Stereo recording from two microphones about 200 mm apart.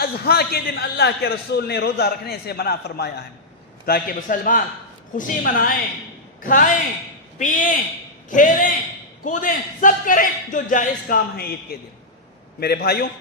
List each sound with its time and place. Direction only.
0.0 s a man's voice: 50° left (ahead or behind)